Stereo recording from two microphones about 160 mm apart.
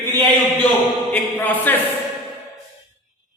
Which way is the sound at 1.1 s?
10° left (ahead or behind).